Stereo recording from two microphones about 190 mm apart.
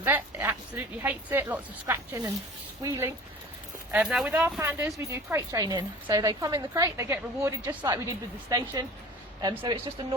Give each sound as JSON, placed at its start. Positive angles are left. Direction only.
{"t": 0.0, "sound": "a woman's voice", "side_deg": -10}